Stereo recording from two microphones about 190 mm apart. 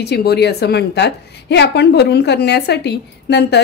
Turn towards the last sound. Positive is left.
turn(degrees=60)  # may be behind; listen again after turning